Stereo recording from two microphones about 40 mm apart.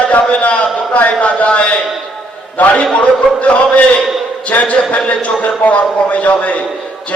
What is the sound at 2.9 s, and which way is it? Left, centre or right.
A man's voice, left.